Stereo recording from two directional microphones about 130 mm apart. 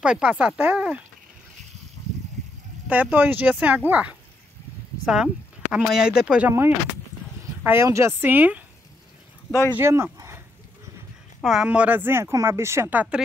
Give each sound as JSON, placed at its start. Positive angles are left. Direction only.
{"t": 0.0, "sound": "speech", "side_deg": -5}
{"t": 2.9, "sound": "speech", "side_deg": -10}
{"t": 7.6, "sound": "speech", "side_deg": -20}
{"t": 9.5, "sound": "speech", "side_deg": 15}
{"t": 9.8, "sound": "speech", "side_deg": -20}
{"t": 11.4, "sound": "speech", "side_deg": -5}